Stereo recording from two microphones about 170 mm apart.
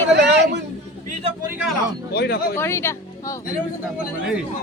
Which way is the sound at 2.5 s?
15° left (ahead or behind).